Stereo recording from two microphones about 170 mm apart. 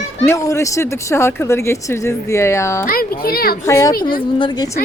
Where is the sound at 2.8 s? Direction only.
60° left (ahead or behind).